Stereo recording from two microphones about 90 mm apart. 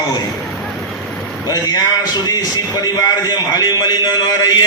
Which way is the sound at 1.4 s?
45° left (ahead or behind).